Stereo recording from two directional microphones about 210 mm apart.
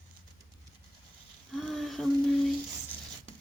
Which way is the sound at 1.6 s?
Centre (ahead or behind).